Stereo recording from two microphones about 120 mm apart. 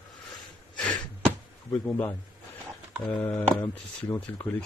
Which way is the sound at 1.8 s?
20° left (ahead or behind).